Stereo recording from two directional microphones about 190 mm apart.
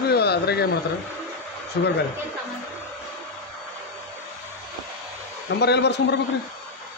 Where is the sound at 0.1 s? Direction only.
60° left (ahead or behind).